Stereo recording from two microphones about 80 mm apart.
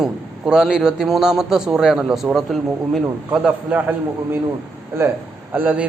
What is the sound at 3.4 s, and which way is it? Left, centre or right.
Speech, right.